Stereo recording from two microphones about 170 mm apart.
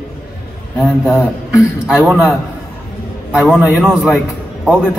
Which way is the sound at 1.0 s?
5° right (ahead or behind).